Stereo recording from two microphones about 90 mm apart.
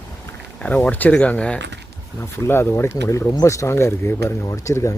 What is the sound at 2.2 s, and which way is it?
Speech, 25° left (ahead or behind).